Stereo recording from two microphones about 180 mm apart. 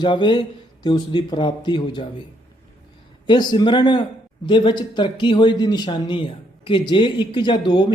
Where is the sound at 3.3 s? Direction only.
25° left (ahead or behind).